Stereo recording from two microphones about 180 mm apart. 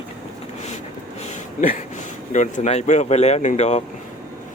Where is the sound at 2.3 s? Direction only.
40° left (ahead or behind).